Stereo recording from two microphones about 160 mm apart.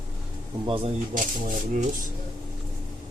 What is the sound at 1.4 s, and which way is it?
Speech, 60° right (ahead or behind).